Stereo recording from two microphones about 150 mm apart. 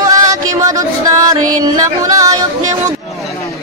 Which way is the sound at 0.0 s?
25° right (ahead or behind).